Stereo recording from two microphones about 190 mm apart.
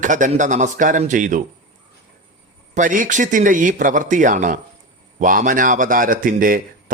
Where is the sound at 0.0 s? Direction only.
40° right (ahead or behind).